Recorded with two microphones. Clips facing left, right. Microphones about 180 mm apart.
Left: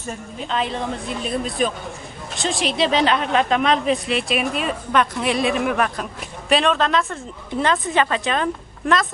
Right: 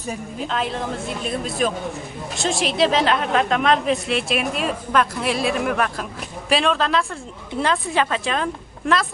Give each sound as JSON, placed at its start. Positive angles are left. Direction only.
{"t": 0.0, "sound": "a woman's voice", "side_deg": 0}